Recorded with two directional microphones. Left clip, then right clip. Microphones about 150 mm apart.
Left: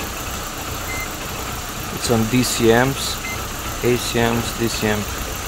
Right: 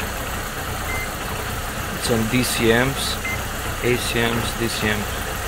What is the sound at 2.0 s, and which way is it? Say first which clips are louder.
Speech: left 2 dB; 55° left (ahead or behind).